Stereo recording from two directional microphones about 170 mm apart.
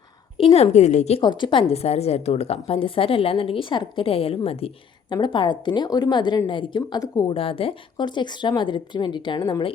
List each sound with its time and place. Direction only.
0.3 s a woman's voice: 35° left (ahead or behind)
1.2 s a woman's voice: 25° left (ahead or behind)